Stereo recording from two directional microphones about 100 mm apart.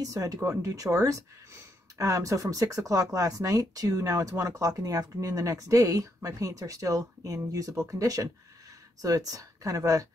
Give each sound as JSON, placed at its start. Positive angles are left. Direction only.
{"t": 0.0, "sound": "speech", "side_deg": -35}